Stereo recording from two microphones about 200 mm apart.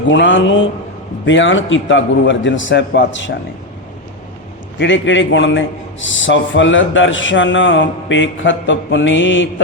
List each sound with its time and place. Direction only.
0.1 s a man's voice: 65° left (ahead or behind)
4.8 s a man's voice: 65° left (ahead or behind)